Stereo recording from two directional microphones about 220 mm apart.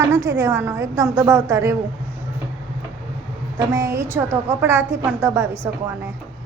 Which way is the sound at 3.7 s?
15° right (ahead or behind).